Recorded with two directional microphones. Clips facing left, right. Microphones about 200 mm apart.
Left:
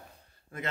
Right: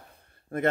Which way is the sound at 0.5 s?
55° right (ahead or behind).